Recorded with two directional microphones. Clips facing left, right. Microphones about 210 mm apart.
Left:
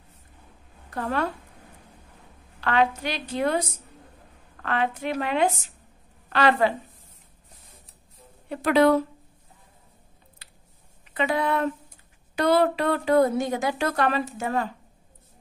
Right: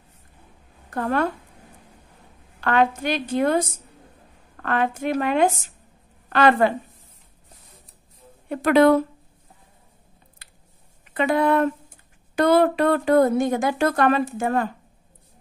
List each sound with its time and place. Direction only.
0.8 s a woman's voice: 50° right (ahead or behind)
2.6 s speech: 50° right (ahead or behind)
8.5 s speech: 55° right (ahead or behind)
10.4 s a sound: 50° right (ahead or behind)
11.1 s speech: 50° right (ahead or behind)